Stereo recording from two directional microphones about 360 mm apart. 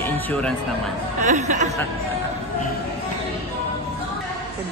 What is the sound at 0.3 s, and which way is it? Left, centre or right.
Speech, centre.